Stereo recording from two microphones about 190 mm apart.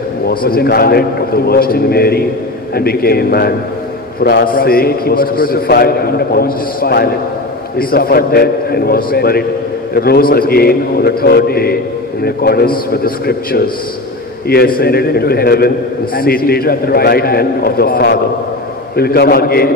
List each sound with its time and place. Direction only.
0.3 s a man's voice: 50° left (ahead or behind)